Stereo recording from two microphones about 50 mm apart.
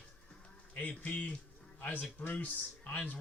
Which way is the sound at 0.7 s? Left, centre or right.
Left.